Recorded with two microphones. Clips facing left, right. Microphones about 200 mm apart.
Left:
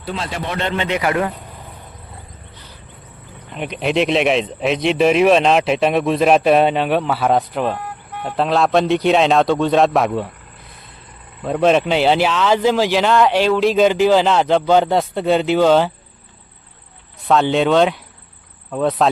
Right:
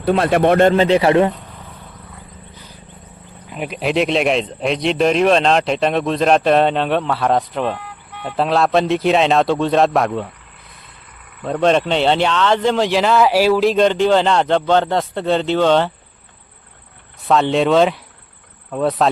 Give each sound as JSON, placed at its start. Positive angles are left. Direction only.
{"t": 0.0, "sound": "speech", "side_deg": -60}
{"t": 3.5, "sound": "speech", "side_deg": -5}
{"t": 7.8, "sound": "vehicle", "side_deg": 45}
{"t": 8.4, "sound": "speech", "side_deg": 0}
{"t": 11.4, "sound": "speech", "side_deg": 5}
{"t": 17.2, "sound": "speech", "side_deg": 0}